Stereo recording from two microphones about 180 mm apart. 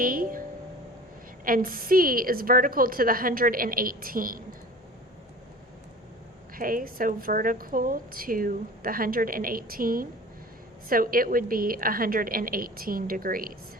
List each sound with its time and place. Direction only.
0.0 s a woman's voice: 50° right (ahead or behind)
1.5 s a woman's voice: 50° right (ahead or behind)
6.5 s a woman's voice: 50° right (ahead or behind)